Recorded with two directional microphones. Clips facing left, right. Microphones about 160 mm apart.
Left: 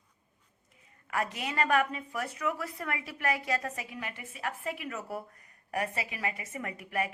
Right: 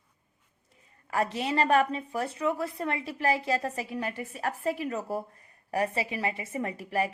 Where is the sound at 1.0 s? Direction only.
30° right (ahead or behind).